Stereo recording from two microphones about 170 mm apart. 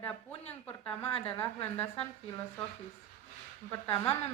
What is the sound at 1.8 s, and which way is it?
Speech, 15° left (ahead or behind).